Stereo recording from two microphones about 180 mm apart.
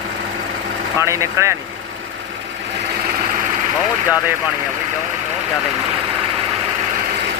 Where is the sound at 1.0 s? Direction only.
15° right (ahead or behind).